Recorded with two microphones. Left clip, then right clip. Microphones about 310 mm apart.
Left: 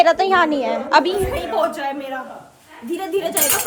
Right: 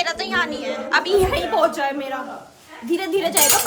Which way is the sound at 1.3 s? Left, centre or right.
Centre.